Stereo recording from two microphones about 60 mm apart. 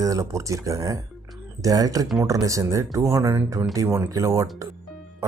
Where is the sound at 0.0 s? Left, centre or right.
Right.